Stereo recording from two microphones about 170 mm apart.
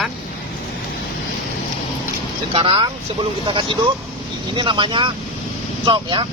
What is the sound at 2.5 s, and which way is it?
Speech, 30° right (ahead or behind).